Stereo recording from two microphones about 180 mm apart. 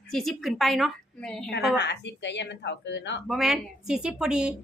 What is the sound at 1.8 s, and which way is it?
Speech, 70° left (ahead or behind).